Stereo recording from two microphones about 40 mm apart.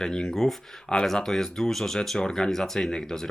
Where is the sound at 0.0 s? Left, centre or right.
Centre.